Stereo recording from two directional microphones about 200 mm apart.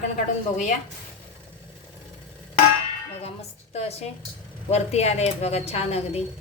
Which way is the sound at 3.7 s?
30° left (ahead or behind).